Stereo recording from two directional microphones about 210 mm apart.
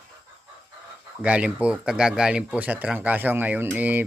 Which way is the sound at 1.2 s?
5° right (ahead or behind).